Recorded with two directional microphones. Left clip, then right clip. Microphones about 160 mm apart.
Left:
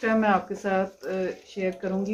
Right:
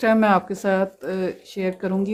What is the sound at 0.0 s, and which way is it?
Speech, 90° right.